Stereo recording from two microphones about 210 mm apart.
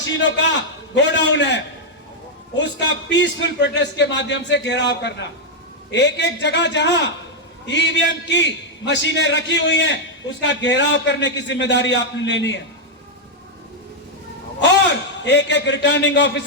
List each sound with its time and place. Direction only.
0.0 s a man's voice: 60° left (ahead or behind)
15.2 s a man's voice: 55° left (ahead or behind)